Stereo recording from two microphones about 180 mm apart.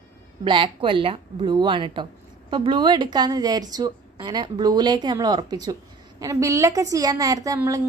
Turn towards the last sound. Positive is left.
turn(degrees=-20)  # may be behind; listen again after turning